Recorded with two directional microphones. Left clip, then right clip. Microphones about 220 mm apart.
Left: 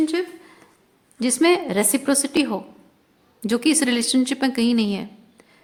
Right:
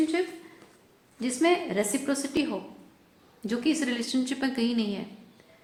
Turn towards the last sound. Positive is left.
turn(degrees=40)  # may be behind; listen again after turning